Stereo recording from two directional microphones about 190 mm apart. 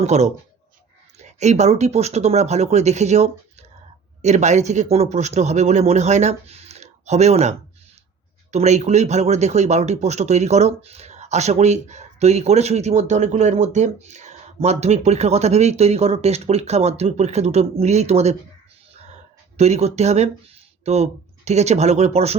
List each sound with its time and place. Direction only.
0.0 s speech: 35° right (ahead or behind)
19.5 s speech: 35° right (ahead or behind)